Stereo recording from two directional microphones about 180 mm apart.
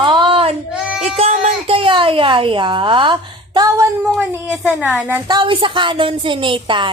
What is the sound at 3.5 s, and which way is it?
Female singing, 20° right (ahead or behind).